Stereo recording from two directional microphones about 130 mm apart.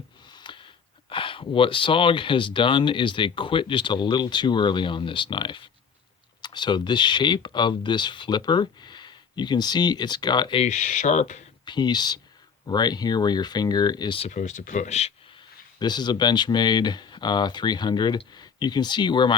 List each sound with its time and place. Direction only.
0.3 s a sound: 35° left (ahead or behind)
1.1 s speech: 40° left (ahead or behind)
10.6 s speech: 70° left (ahead or behind)
11.6 s speech: 35° left (ahead or behind)
14.3 s speech: 70° left (ahead or behind)
15.8 s speech: 35° left (ahead or behind)